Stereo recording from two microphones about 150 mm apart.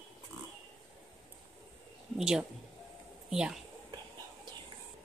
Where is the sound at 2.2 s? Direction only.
5° right (ahead or behind).